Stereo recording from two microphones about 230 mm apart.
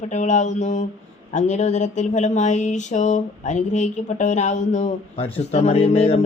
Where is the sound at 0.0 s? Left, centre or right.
Left.